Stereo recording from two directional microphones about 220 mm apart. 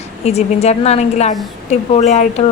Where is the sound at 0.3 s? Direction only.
30° left (ahead or behind).